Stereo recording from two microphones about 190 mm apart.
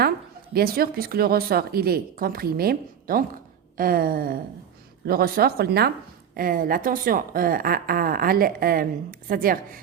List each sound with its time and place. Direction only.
0.5 s a woman's voice: 50° right (ahead or behind)